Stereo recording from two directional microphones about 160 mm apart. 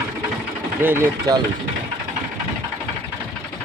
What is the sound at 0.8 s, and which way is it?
Speech, 15° right (ahead or behind).